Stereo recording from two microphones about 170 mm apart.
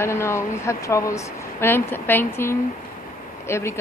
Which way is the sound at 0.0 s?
15° left (ahead or behind).